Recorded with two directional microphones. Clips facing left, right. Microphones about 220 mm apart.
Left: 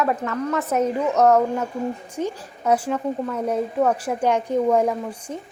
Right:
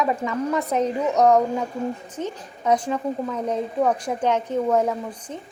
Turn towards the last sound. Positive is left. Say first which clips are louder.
# left 2 dB
turn(degrees=10)  # may be behind; listen again after turning